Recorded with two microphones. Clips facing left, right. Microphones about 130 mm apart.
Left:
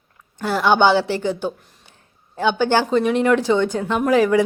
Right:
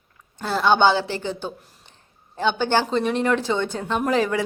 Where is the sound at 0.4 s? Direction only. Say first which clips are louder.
Left 2 dB; 15° left (ahead or behind).